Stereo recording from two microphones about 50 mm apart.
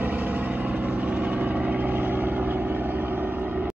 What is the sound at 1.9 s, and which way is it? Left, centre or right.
Vehicle, right.